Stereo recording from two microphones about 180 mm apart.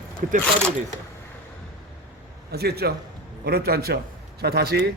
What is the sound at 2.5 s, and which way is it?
A man's voice, 60° right (ahead or behind).